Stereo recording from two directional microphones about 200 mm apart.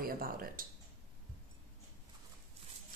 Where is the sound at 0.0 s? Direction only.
45° right (ahead or behind).